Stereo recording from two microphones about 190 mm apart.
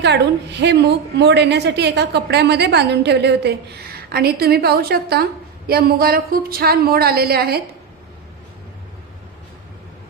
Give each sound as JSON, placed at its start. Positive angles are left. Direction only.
{"t": 0.0, "sound": "a woman's voice", "side_deg": -65}